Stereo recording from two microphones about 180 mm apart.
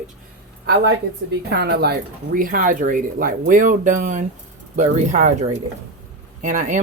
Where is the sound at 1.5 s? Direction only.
65° right (ahead or behind).